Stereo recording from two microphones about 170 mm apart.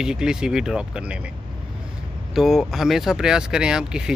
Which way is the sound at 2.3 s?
Centre (ahead or behind).